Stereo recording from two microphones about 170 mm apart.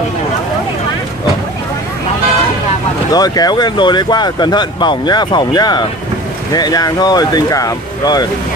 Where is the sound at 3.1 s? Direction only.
20° left (ahead or behind).